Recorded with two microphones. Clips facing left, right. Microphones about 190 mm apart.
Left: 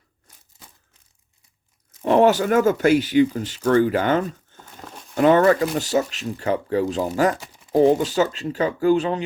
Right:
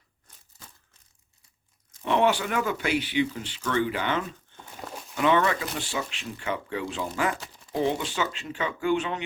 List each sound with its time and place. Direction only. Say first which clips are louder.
2.0 s speech: left 7 dB; 40° left (ahead or behind)
7.3 s crumpling: left 2 dB; 10° left (ahead or behind)
7.7 s speech: left 10 dB; 40° left (ahead or behind)